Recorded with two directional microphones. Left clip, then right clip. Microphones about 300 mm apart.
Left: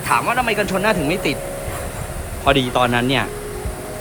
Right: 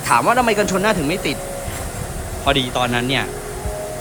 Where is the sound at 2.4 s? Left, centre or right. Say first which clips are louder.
Left 2 dB; centre.